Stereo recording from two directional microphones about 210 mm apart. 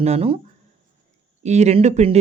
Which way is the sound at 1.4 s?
30° right (ahead or behind).